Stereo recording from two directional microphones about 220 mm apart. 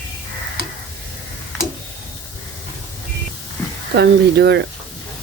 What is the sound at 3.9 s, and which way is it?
Speech, 50° right (ahead or behind).